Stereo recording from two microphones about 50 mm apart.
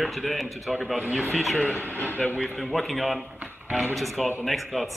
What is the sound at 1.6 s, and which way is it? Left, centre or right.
Speech, left.